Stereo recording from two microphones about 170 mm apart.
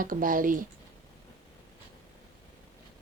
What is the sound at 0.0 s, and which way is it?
Speech, 55° right (ahead or behind).